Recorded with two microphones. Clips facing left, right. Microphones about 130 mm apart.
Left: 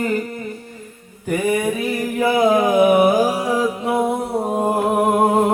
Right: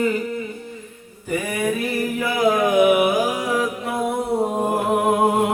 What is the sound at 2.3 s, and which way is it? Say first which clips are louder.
Music: left 2 dB; 30° left (ahead or behind).